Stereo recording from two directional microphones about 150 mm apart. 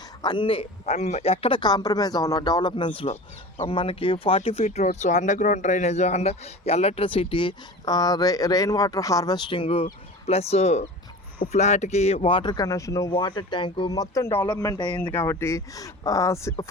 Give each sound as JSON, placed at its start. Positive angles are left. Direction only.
{"t": 0.2, "sound": "speech", "side_deg": 30}
{"t": 15.0, "sound": "speech", "side_deg": 15}